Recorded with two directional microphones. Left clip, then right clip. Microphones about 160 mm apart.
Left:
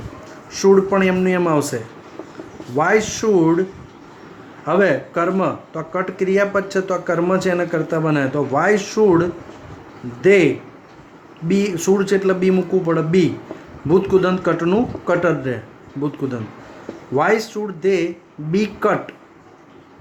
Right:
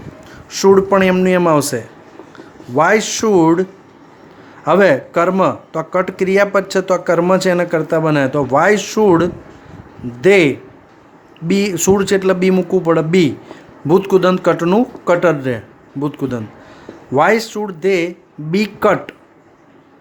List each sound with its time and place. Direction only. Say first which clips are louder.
0.5 s speech: right 3 dB; 55° right (ahead or behind)